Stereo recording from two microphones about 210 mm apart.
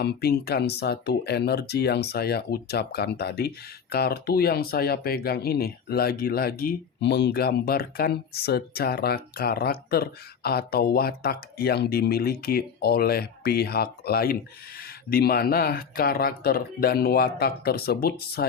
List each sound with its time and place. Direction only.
0.0 s speech: 50° left (ahead or behind)